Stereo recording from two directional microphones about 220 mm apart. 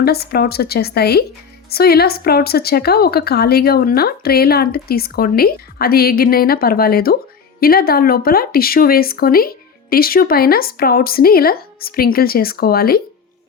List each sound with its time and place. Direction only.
0.0 s speech: 45° left (ahead or behind)